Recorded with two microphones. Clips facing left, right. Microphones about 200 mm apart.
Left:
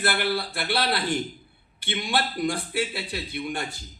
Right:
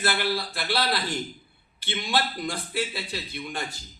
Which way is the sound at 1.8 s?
60° left (ahead or behind).